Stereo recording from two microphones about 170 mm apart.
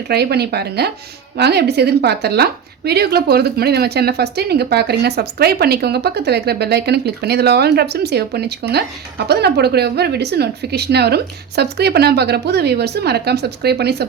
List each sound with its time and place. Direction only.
0.1 s a woman's voice: 70° right (ahead or behind)